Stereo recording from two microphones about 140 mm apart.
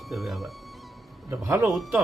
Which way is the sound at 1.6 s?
Centre (ahead or behind).